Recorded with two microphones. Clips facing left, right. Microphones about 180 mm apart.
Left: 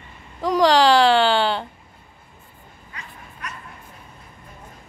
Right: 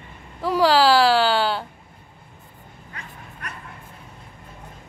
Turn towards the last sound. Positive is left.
turn(degrees=-55)  # may be behind; listen again after turning